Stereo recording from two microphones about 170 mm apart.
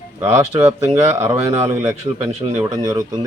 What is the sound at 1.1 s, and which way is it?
A man's voice, 15° right (ahead or behind).